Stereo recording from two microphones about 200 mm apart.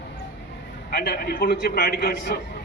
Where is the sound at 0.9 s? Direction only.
55° left (ahead or behind).